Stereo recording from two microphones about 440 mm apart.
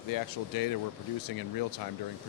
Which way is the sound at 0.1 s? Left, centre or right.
Left.